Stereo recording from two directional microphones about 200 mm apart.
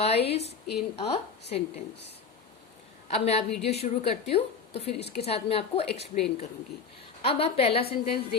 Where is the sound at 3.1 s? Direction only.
30° left (ahead or behind).